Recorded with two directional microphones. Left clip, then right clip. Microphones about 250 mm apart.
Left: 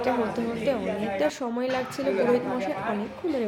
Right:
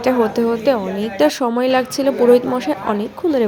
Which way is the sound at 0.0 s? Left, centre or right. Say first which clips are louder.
Right 10 dB; right.